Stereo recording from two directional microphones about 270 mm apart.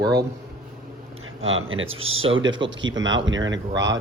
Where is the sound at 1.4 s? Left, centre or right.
Right.